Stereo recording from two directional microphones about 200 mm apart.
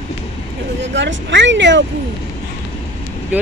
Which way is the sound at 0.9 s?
65° right (ahead or behind).